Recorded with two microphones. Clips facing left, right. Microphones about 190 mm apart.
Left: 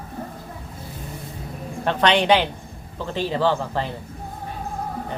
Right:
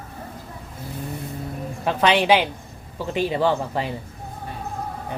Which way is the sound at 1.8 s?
5° right (ahead or behind).